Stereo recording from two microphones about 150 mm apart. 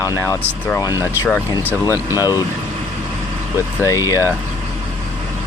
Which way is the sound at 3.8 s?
20° left (ahead or behind).